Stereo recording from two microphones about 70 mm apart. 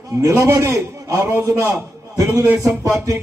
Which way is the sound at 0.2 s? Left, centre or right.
Right.